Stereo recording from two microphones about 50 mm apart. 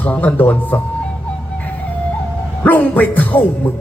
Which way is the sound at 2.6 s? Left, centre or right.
Left.